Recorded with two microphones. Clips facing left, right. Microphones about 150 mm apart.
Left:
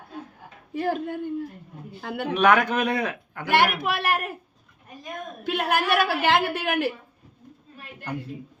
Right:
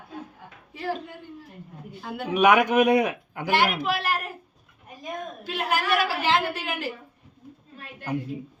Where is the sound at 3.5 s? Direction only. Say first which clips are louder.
Left 1 dB; 60° left (ahead or behind).